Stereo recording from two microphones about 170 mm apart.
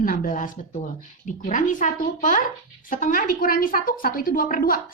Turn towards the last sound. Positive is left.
turn(degrees=55)  # may be behind; listen again after turning